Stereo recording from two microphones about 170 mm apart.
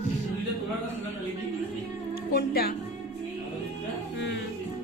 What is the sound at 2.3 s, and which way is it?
Music, 65° left (ahead or behind).